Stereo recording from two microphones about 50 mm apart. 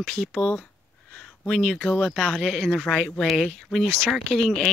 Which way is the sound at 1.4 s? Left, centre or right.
Centre.